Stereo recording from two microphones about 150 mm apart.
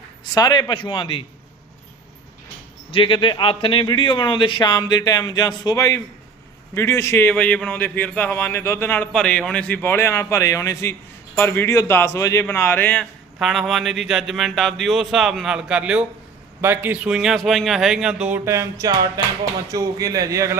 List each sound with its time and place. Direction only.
0.3 s a man's voice: 25° left (ahead or behind)
2.9 s a man's voice: 35° left (ahead or behind); by 20.6 s 20° right (ahead or behind)